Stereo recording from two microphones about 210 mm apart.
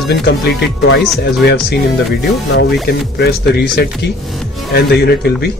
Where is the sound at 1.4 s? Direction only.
50° left (ahead or behind).